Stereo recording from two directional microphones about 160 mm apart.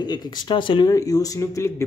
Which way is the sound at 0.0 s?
25° left (ahead or behind).